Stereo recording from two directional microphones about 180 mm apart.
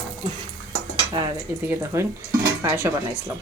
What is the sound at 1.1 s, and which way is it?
Speech, 15° right (ahead or behind).